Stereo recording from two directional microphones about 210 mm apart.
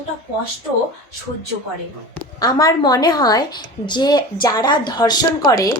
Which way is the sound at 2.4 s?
20° left (ahead or behind).